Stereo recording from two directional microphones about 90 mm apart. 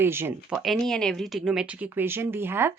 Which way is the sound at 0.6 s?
5° left (ahead or behind).